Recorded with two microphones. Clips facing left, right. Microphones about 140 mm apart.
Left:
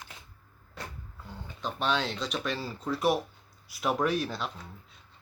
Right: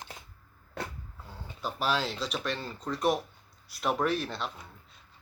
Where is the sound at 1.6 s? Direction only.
5° right (ahead or behind).